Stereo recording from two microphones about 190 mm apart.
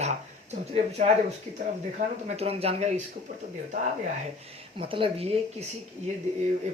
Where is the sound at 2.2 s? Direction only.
35° right (ahead or behind).